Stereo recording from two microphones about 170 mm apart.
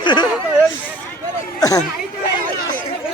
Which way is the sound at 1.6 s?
20° left (ahead or behind).